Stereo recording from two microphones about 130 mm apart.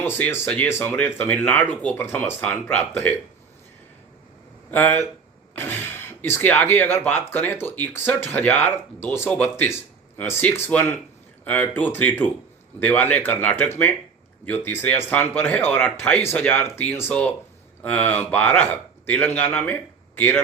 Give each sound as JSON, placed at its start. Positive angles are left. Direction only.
{"t": 0.0, "sound": "speech", "side_deg": 15}
{"t": 4.7, "sound": "speech", "side_deg": 15}